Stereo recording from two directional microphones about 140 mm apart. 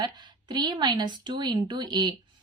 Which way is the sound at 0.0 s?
30° right (ahead or behind).